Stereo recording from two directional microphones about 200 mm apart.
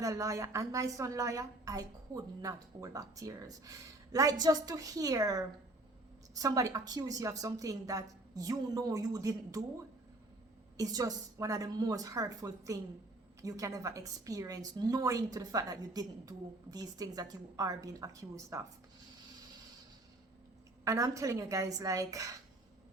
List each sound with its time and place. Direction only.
0.0 s a woman's voice: 15° right (ahead or behind)
10.8 s a woman's voice: 15° right (ahead or behind)
20.8 s a woman's voice: 15° right (ahead or behind)